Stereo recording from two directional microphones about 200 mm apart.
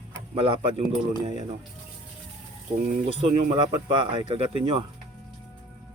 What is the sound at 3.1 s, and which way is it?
Speech, 25° right (ahead or behind).